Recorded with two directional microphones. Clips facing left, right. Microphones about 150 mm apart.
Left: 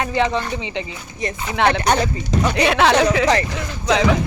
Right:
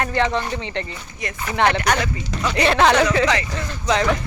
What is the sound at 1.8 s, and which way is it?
Speech, 25° left (ahead or behind).